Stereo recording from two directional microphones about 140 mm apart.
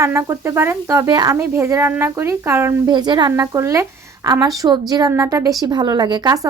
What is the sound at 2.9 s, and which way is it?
Speech, 30° right (ahead or behind).